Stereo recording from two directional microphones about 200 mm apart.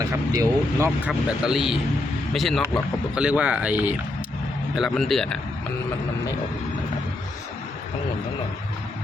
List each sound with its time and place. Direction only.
0.0 s speech: 15° right (ahead or behind)
1.5 s speech: centre (ahead or behind)